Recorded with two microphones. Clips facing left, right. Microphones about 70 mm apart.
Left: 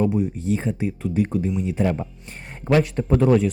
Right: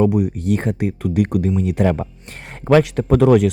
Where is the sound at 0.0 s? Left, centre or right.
Right.